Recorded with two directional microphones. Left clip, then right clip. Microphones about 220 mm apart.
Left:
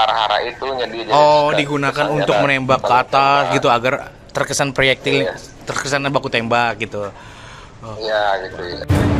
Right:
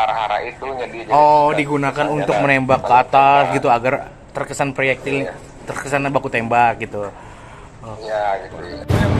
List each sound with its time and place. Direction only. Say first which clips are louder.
0.0 s a man's voice: left 3 dB; 30° left (ahead or behind)